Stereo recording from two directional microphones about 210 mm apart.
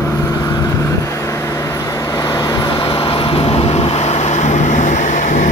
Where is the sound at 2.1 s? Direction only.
20° left (ahead or behind).